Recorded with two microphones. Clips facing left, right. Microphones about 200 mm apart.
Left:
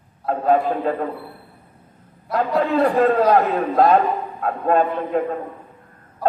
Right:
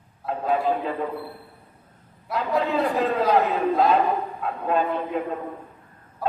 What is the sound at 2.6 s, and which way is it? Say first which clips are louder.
A man's voice: left 8 dB; 55° left (ahead or behind).